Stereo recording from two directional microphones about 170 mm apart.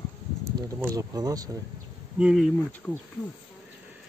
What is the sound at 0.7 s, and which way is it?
Speech, 20° right (ahead or behind).